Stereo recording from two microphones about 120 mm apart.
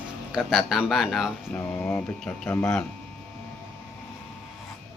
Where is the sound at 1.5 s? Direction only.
15° left (ahead or behind).